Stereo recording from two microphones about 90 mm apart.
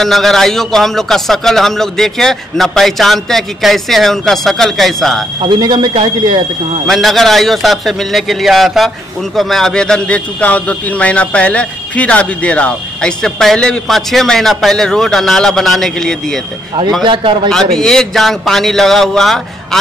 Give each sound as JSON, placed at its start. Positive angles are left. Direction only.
{"t": 0.0, "sound": "a man's voice", "side_deg": 5}
{"t": 5.6, "sound": "speech", "side_deg": -55}
{"t": 6.9, "sound": "a man's voice", "side_deg": 0}
{"t": 17.0, "sound": "speech", "side_deg": -65}
{"t": 17.5, "sound": "a man's voice", "side_deg": 5}